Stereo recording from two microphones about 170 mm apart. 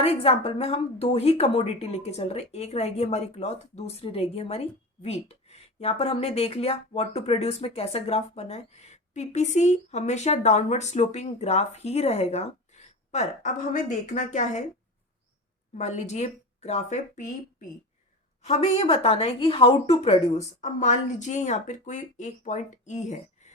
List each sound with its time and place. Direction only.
0.0 s a woman's voice: 35° left (ahead or behind)
15.8 s a woman's voice: 45° left (ahead or behind)